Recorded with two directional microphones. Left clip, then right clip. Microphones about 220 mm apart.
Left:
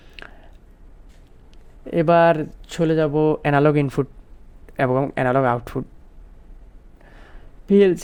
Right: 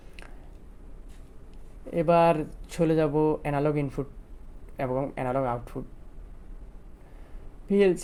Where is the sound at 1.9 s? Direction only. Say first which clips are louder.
Left 6 dB; 40° left (ahead or behind).